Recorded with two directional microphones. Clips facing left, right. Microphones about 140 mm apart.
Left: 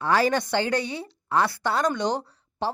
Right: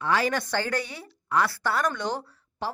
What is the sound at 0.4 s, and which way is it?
Speech, 20° left (ahead or behind).